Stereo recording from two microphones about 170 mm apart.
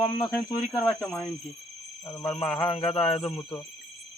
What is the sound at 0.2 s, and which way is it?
Speech, centre (ahead or behind).